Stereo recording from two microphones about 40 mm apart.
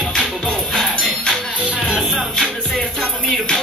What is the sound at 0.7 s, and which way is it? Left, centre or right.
Music, left.